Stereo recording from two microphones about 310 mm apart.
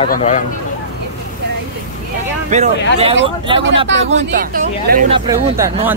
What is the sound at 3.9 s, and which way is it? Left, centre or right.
Speech, right.